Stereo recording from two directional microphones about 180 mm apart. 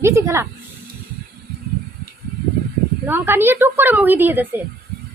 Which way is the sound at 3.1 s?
10° right (ahead or behind).